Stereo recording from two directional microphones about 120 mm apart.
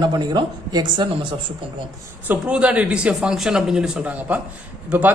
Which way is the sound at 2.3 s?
10° right (ahead or behind).